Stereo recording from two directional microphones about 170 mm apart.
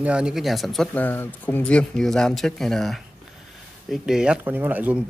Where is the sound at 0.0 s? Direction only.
5° right (ahead or behind).